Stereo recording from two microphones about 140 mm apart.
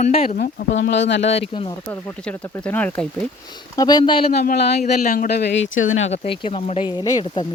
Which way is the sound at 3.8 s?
30° left (ahead or behind).